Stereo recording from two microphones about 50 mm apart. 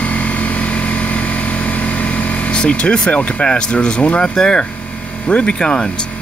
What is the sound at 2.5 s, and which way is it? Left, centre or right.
Speech, left.